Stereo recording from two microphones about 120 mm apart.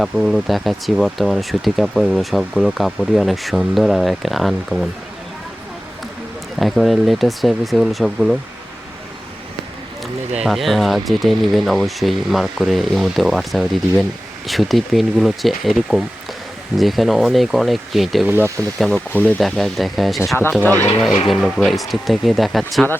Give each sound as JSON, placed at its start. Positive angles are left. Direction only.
{"t": 0.0, "sound": "speech", "side_deg": 0}
{"t": 6.6, "sound": "speech", "side_deg": 0}
{"t": 10.3, "sound": "speech", "side_deg": 0}
{"t": 18.3, "sound": "speech", "side_deg": -20}
{"t": 18.8, "sound": "speech", "side_deg": 5}
{"t": 19.4, "sound": "speech", "side_deg": 0}